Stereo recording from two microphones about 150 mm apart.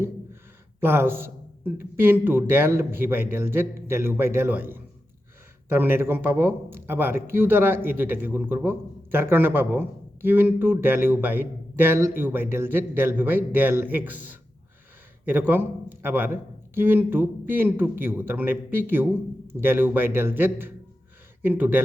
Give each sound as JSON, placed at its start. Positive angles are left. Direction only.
{"t": 0.8, "sound": "a man's voice", "side_deg": -15}